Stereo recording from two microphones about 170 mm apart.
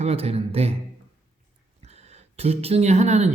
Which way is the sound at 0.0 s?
35° right (ahead or behind).